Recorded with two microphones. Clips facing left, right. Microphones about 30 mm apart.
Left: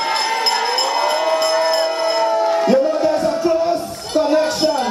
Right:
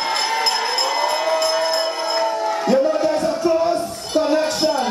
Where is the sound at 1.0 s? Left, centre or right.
Centre.